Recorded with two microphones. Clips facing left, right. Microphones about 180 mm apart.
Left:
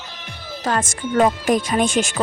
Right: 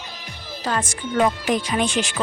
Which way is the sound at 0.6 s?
45° left (ahead or behind).